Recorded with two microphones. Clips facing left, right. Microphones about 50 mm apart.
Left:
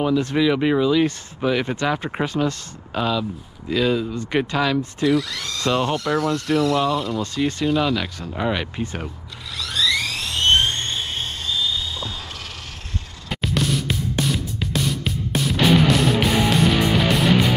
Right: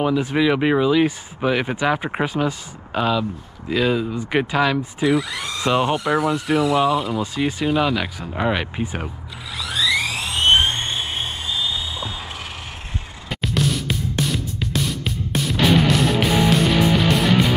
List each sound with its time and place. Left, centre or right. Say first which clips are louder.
0.0 s speech: even; centre
9.6 s a sound: right 1 dB; centre
13.3 s music: even; centre